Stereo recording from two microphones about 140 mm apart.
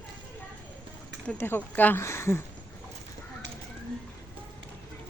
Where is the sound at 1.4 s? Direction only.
15° left (ahead or behind).